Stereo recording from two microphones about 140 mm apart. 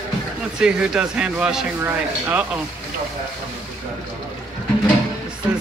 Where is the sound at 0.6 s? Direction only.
5° right (ahead or behind).